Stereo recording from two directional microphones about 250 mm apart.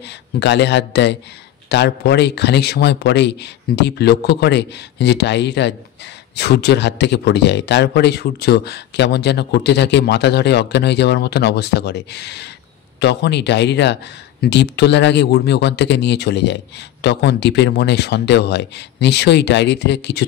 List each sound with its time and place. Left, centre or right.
0.0 s a man's voice: left